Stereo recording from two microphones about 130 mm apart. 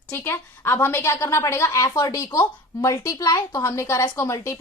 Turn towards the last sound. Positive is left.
turn(degrees=20)  # may be behind; listen again after turning